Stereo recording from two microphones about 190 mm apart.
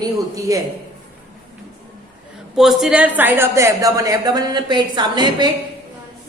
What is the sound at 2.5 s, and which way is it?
A woman's voice, centre (ahead or behind).